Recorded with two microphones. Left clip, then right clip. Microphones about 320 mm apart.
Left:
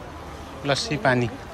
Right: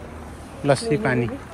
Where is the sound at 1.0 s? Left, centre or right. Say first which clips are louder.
Left 2 dB; centre.